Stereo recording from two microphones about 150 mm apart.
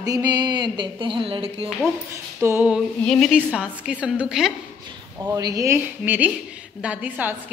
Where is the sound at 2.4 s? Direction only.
15° right (ahead or behind).